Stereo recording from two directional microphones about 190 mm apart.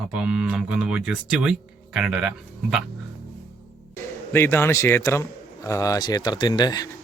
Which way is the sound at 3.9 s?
10° left (ahead or behind).